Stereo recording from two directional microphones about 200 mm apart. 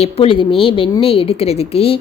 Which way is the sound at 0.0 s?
30° left (ahead or behind).